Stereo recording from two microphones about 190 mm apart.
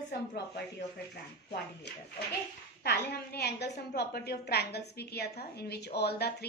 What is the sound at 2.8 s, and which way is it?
A woman's voice, 60° left (ahead or behind).